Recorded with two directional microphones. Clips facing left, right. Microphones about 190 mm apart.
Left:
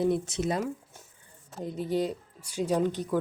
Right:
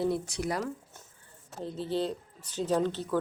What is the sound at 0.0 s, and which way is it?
Speech, 20° left (ahead or behind).